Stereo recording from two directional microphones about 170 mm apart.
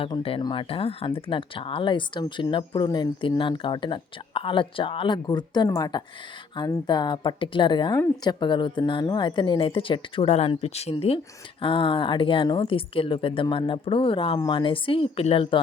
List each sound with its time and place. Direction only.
0.0 s speech: 30° left (ahead or behind)